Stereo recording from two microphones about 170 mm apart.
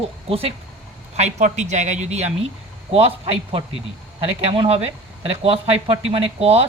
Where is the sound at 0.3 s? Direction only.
35° right (ahead or behind).